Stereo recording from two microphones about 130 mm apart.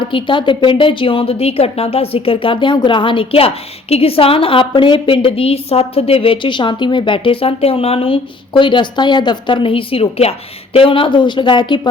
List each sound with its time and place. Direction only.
0.0 s a woman's voice: 40° left (ahead or behind)